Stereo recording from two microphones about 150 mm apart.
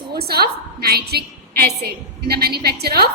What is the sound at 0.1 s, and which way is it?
A woman's voice, 90° right.